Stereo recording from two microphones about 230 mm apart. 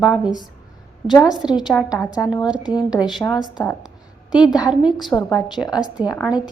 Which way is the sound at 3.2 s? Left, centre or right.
Centre.